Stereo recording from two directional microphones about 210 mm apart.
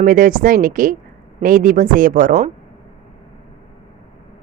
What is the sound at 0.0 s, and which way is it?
A woman's voice, 40° right (ahead or behind).